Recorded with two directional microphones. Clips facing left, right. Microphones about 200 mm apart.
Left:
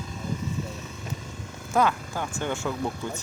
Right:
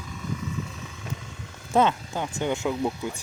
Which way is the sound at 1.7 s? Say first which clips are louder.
Right 2 dB; 25° right (ahead or behind).